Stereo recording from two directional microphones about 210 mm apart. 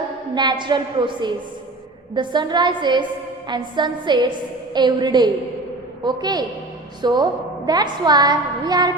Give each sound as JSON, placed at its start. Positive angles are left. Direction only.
{"t": 0.3, "sound": "a woman's voice", "side_deg": -20}